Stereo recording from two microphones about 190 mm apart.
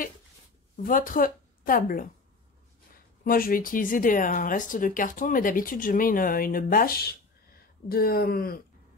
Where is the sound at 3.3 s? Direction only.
50° left (ahead or behind).